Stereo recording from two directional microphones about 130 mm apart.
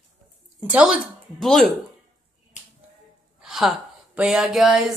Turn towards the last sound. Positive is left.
turn(degrees=0)  # may be behind; listen again after turning